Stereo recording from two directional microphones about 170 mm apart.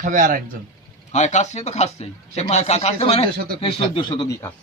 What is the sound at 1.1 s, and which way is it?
Speech, 45° left (ahead or behind).